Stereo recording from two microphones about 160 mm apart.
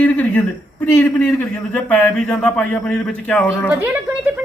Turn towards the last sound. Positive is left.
turn(degrees=-15)  # may be behind; listen again after turning